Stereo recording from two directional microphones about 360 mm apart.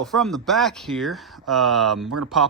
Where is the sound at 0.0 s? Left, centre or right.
Centre.